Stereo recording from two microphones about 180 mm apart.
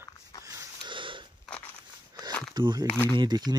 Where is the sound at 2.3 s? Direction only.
5° left (ahead or behind).